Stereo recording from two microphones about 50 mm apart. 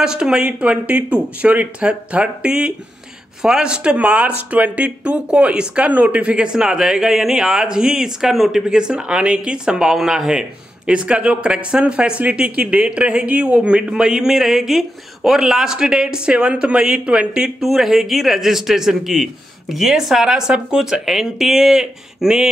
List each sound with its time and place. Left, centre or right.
0.0 s speech: centre
10.9 s speech: right
17.6 s speech: centre